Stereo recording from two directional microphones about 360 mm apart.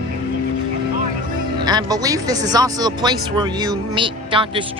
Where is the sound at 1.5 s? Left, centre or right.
Centre.